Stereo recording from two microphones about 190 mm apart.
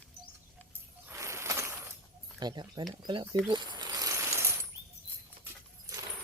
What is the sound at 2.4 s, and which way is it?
Speech, 20° right (ahead or behind).